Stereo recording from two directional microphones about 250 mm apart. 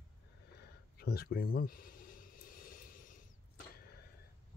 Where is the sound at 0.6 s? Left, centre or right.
Left.